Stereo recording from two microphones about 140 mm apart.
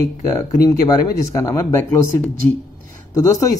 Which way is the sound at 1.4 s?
20° left (ahead or behind).